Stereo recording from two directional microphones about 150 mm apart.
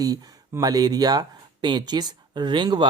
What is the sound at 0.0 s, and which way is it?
Speech, 25° right (ahead or behind).